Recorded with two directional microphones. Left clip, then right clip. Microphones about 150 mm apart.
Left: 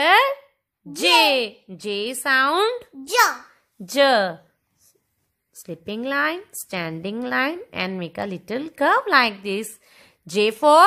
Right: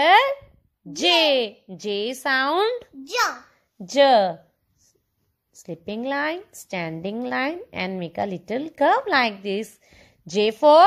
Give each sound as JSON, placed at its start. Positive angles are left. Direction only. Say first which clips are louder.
{"t": 0.0, "sound": "a sound", "louder": "even", "side_deg": -5}
{"t": 0.9, "sound": "a woman's voice", "louder": "left 2 dB", "side_deg": -10}
{"t": 2.5, "sound": "a woman's voice", "louder": "left 1 dB", "side_deg": 0}
{"t": 3.1, "sound": "a child's voice", "louder": "left 5 dB", "side_deg": 35}
{"t": 3.8, "sound": "a woman's voice", "louder": "right 1 dB", "side_deg": 0}
{"t": 5.5, "sound": "a woman's voice", "louder": "left 1 dB", "side_deg": 0}